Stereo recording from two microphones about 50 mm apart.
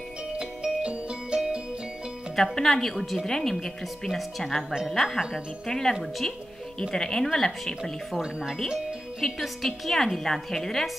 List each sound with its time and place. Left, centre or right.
0.3 s music: centre
2.3 s a woman's voice: centre
8.2 s speech: centre
9.2 s a woman's voice: centre